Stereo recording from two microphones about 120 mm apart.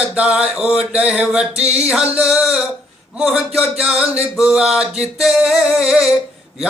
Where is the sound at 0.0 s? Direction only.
10° right (ahead or behind).